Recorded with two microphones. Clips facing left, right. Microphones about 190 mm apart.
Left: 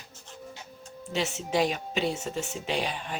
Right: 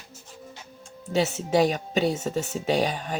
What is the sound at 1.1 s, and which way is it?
Speech, 40° right (ahead or behind).